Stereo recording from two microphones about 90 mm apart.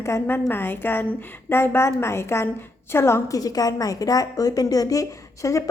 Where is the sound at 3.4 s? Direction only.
45° left (ahead or behind).